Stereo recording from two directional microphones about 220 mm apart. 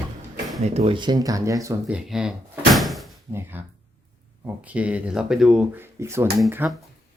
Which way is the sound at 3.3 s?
10° right (ahead or behind).